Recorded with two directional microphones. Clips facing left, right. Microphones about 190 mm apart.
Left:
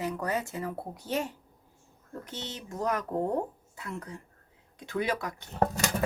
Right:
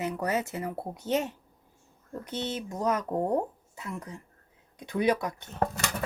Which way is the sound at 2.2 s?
20° right (ahead or behind).